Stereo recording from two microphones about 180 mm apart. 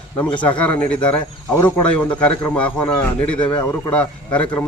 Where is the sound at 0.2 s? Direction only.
25° left (ahead or behind).